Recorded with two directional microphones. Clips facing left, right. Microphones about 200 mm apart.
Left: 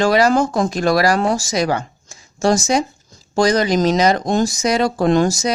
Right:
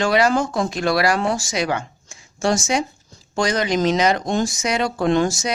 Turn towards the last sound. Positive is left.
turn(degrees=40)  # may be behind; listen again after turning